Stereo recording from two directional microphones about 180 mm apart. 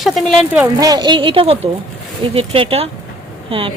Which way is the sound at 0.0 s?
Centre (ahead or behind).